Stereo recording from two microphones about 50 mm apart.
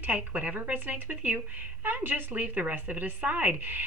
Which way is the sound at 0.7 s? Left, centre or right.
Right.